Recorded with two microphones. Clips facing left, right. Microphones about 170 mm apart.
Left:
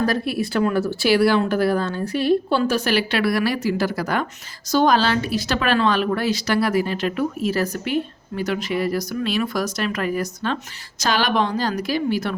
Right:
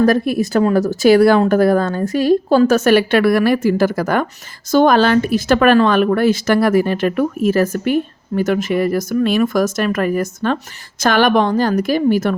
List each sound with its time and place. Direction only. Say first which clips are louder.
0.0 s a woman's voice: right 8 dB; 50° right (ahead or behind)